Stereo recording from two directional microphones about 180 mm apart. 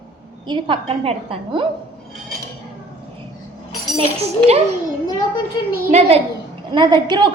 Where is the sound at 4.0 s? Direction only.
35° right (ahead or behind).